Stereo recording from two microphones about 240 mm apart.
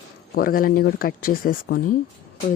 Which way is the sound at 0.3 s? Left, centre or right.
Left.